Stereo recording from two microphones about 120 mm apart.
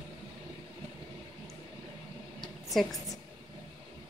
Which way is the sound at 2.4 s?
Centre (ahead or behind).